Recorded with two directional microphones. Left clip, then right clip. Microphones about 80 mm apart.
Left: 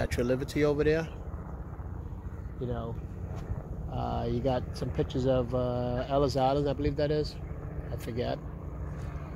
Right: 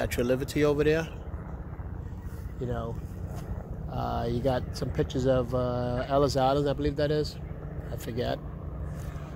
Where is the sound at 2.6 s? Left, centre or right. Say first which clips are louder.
Right 2 dB; left.